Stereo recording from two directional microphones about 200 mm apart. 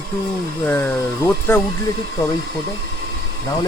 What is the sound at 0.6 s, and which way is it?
Speech, 10° left (ahead or behind).